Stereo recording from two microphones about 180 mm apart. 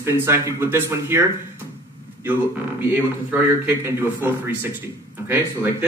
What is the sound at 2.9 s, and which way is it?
A man's voice, 10° right (ahead or behind).